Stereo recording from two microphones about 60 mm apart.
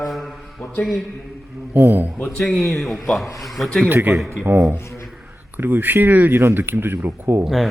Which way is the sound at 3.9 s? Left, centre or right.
Right.